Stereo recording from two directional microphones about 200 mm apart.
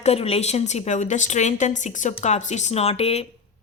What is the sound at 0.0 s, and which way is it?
A woman's voice, 30° left (ahead or behind).